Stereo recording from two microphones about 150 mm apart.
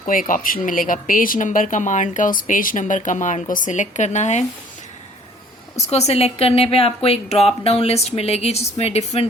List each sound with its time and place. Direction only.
0.0 s speech: 65° left (ahead or behind)
5.7 s a woman's voice: 45° left (ahead or behind)